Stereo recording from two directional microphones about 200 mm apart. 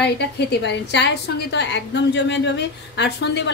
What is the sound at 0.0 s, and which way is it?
A woman's voice, 60° left (ahead or behind).